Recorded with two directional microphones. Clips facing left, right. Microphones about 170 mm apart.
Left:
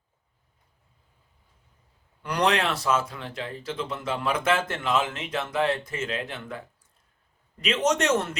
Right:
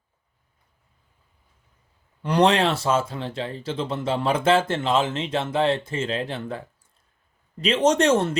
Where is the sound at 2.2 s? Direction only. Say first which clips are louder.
Right 5 dB; 25° right (ahead or behind).